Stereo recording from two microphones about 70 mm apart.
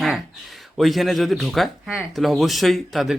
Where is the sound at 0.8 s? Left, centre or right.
Centre.